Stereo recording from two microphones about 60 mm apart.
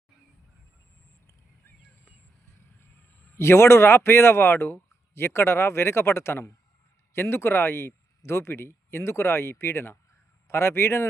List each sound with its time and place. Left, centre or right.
3.3 s speech: left